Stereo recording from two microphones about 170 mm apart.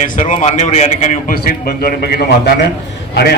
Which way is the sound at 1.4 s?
60° left (ahead or behind).